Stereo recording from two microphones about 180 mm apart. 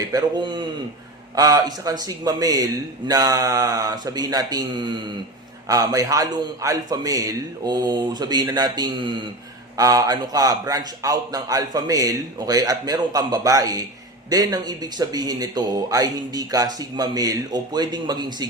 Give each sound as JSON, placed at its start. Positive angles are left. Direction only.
{"t": 0.0, "sound": "speech", "side_deg": -20}